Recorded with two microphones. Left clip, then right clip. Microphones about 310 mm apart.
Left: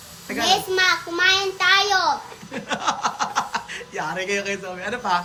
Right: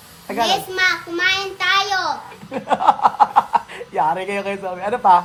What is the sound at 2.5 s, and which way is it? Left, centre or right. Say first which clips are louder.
Speech: right 9 dB; centre.